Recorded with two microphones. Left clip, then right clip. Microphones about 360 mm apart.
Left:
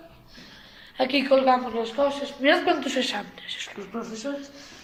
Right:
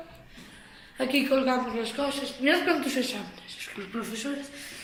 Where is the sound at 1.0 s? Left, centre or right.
Left.